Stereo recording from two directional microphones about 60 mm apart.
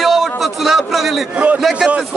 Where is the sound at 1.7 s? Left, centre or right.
Centre.